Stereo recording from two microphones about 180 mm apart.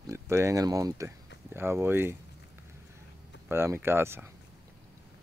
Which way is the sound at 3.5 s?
15° right (ahead or behind).